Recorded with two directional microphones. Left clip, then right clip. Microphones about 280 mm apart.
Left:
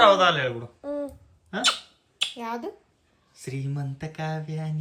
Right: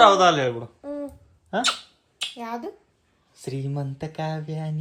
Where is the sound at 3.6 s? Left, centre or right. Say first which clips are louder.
Right 4 dB; centre.